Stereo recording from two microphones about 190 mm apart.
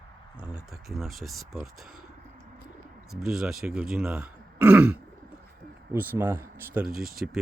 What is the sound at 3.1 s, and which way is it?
Speech, centre (ahead or behind).